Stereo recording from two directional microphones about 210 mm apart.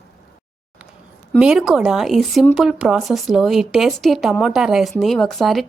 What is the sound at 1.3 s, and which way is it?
Speech, centre (ahead or behind).